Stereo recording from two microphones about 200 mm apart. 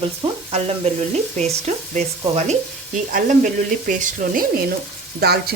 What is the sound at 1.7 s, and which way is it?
Frying, 35° right (ahead or behind).